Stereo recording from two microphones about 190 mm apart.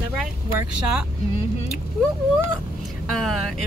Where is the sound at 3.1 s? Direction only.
Centre (ahead or behind).